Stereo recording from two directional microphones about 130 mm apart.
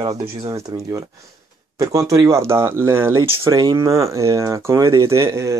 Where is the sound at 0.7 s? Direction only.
30° right (ahead or behind).